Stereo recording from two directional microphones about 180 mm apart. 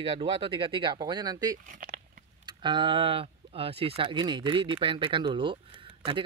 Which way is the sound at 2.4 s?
25° right (ahead or behind).